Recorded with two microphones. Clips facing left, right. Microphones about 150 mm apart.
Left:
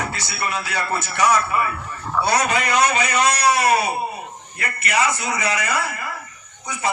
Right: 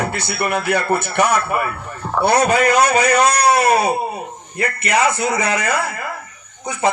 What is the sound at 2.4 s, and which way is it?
Speech, 45° right (ahead or behind).